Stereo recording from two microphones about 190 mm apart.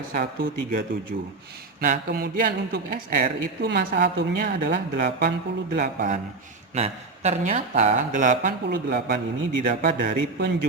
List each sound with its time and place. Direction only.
0.1 s a woman's voice: 45° right (ahead or behind)
5.7 s speech: 40° right (ahead or behind)
8.9 s a man's voice: 60° right (ahead or behind)
10.3 s a man's voice: 60° right (ahead or behind)